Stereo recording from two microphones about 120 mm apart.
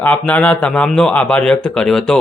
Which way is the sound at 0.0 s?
10° left (ahead or behind).